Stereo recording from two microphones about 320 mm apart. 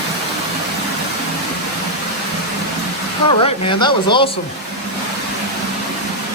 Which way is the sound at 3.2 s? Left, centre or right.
Centre.